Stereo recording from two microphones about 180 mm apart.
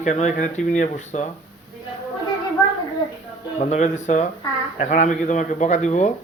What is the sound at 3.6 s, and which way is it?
Speech, 40° left (ahead or behind).